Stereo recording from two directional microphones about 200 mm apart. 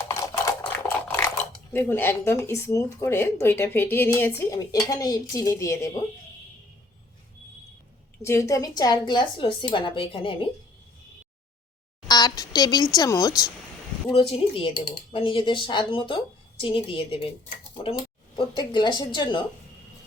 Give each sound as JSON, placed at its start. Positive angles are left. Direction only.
{"t": 0.0, "sound": "toothbrush", "side_deg": 15}
{"t": 1.7, "sound": "speech", "side_deg": 10}
{"t": 8.2, "sound": "speech", "side_deg": 15}
{"t": 12.0, "sound": "a woman's voice", "side_deg": 20}
{"t": 14.1, "sound": "speech", "side_deg": 30}